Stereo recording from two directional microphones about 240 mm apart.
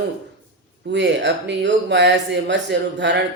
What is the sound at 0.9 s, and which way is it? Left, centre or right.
Speech, right.